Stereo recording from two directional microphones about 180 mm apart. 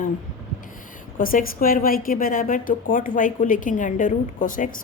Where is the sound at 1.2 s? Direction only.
50° left (ahead or behind).